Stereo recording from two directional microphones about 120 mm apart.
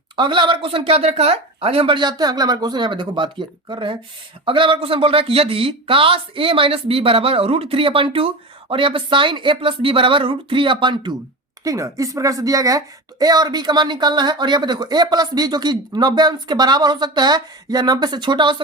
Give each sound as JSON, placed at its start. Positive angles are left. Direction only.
{"t": 0.2, "sound": "speech", "side_deg": -40}
{"t": 11.6, "sound": "speech", "side_deg": -25}